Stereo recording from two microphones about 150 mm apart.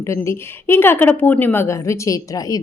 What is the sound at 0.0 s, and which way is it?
Speech, 20° left (ahead or behind).